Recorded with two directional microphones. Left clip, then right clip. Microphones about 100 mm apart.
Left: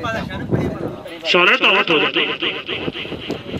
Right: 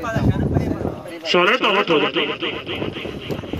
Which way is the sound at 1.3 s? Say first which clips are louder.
Left 3 dB; 55° right (ahead or behind).